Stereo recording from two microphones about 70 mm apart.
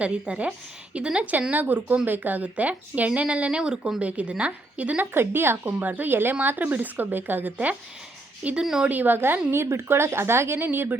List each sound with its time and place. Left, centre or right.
0.0 s speech: centre
5.1 s a woman's voice: right
8.6 s speech: centre
8.9 s a woman's voice: right